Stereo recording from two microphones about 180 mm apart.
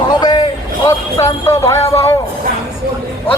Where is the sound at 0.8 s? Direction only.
20° left (ahead or behind).